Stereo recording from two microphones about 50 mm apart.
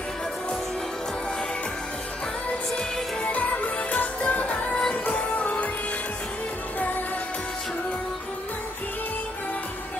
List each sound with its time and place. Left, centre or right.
3.3 s music: left